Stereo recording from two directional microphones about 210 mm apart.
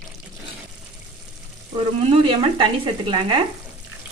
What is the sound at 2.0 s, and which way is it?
Speech, 25° right (ahead or behind).